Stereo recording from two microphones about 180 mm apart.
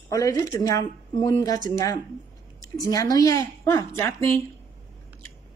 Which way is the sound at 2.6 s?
20° left (ahead or behind).